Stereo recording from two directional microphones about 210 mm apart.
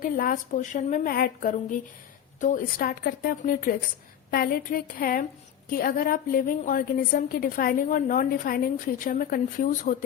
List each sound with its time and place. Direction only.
0.0 s a woman's voice: 40° left (ahead or behind)